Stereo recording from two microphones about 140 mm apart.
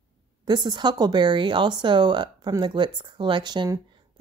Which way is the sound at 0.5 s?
30° right (ahead or behind).